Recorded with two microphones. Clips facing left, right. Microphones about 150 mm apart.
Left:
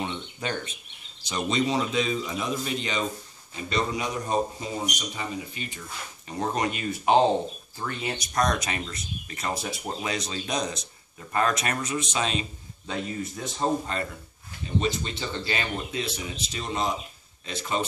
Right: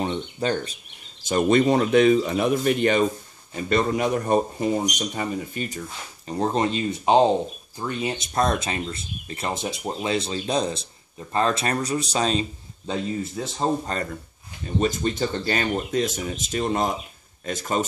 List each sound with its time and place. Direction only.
0.0 s speech: 40° right (ahead or behind)
1.2 s speech: 50° right (ahead or behind)
6.2 s speech: 30° right (ahead or behind)
14.8 s speech: 45° right (ahead or behind)